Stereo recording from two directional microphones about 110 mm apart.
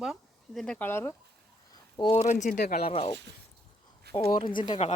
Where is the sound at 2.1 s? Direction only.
90° left; by 3.1 s 60° left (ahead or behind).